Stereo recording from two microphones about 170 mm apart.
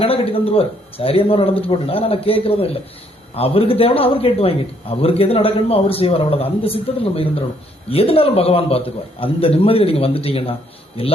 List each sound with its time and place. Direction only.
0.0 s a man's voice: 35° left (ahead or behind)